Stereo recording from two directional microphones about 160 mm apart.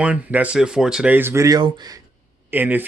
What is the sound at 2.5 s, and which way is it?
Speech, 10° right (ahead or behind).